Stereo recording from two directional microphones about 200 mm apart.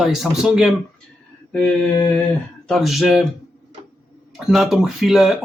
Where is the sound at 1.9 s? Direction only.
10° left (ahead or behind).